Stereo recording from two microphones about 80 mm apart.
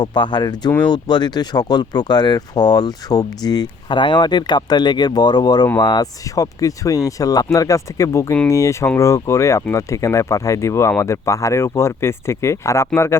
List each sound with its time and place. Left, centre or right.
0.0 s speech: left
3.9 s speech: left
6.3 s speech: left